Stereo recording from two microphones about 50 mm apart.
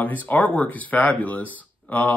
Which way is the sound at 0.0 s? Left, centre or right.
Left.